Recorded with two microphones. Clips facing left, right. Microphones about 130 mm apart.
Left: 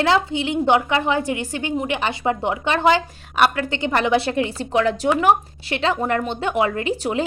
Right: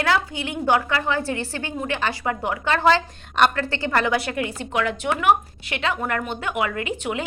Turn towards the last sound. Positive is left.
turn(degrees=30)  # may be behind; listen again after turning